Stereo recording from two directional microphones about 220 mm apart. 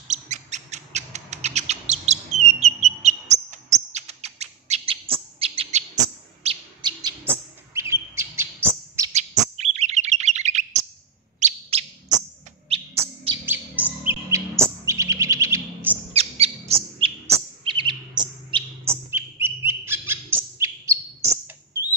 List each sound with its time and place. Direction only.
0.1 s rodents: 30° right (ahead or behind)
6.4 s chirp: 25° right (ahead or behind)
9.1 s bird: 30° right (ahead or behind)
12.6 s chirp: 25° right (ahead or behind)
14.0 s chirp: 10° right (ahead or behind)
16.1 s bird: 30° right (ahead or behind)
17.6 s chirp: 20° right (ahead or behind)
19.0 s bird: 10° right (ahead or behind)